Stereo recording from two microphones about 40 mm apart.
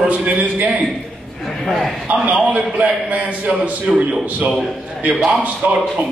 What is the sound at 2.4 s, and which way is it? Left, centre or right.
A man's voice, right.